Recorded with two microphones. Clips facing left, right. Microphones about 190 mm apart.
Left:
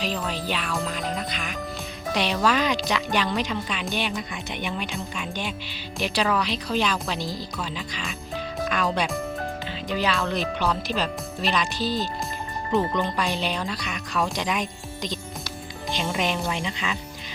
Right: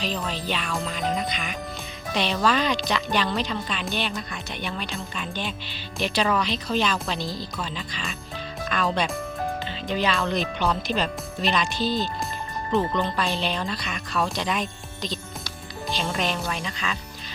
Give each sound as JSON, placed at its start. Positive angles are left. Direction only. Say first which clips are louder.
{"t": 0.0, "sound": "speech", "louder": "left 1 dB", "side_deg": 10}
{"t": 12.9, "sound": "speech", "louder": "even", "side_deg": 15}